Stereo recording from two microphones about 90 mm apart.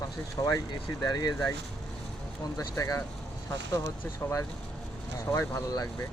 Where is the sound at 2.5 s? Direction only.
40° left (ahead or behind).